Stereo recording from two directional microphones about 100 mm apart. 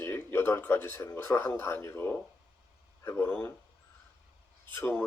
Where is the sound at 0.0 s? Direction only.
20° left (ahead or behind).